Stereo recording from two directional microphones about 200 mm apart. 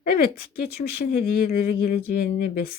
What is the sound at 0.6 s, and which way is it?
Speech, 50° left (ahead or behind).